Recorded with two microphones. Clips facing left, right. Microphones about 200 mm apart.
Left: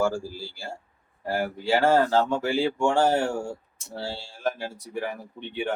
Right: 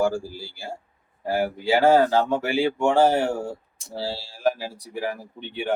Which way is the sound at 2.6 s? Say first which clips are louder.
Right 4 dB; 15° right (ahead or behind).